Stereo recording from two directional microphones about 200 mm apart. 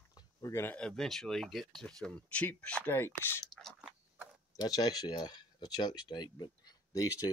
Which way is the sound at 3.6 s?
Centre (ahead or behind).